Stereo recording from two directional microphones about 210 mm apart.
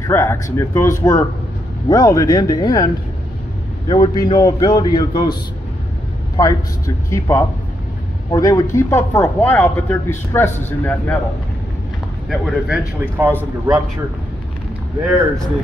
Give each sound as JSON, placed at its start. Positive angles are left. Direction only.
{"t": 0.0, "sound": "a man's voice", "side_deg": 15}
{"t": 3.9, "sound": "a man's voice", "side_deg": 20}
{"t": 6.4, "sound": "speech", "side_deg": 15}
{"t": 12.3, "sound": "speech", "side_deg": 0}